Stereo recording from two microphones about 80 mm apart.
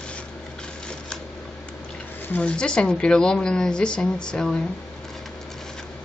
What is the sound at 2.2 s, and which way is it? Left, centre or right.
A woman's voice, left.